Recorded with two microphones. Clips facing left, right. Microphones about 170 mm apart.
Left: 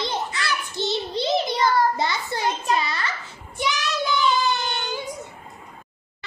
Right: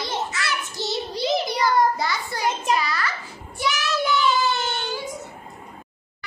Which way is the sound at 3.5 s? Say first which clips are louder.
Right 1 dB; 20° left (ahead or behind).